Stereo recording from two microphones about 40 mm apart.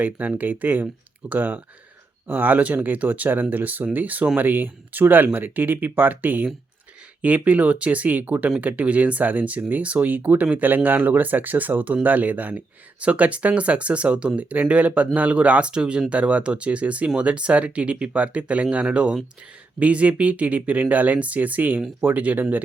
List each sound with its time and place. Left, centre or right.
0.0 s speech: right
15.7 s speech: right